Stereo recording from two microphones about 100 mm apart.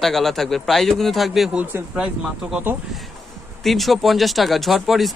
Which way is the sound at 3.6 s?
Centre (ahead or behind).